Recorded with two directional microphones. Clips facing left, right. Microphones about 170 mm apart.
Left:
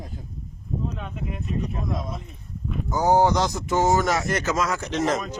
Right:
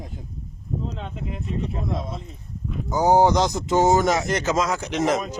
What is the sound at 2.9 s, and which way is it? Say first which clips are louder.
Speech: right 2 dB; 15° right (ahead or behind).